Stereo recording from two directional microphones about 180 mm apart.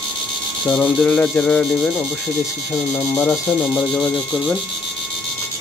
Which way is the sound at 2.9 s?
15° left (ahead or behind).